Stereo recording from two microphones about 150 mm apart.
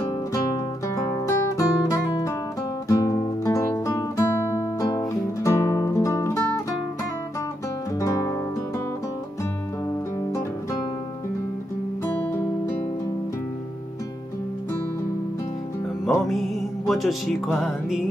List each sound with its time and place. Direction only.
0.8 s music: 25° left (ahead or behind)
2.9 s guitar: 20° left (ahead or behind)
8.0 s music: 25° left (ahead or behind)
16.3 s music: centre (ahead or behind)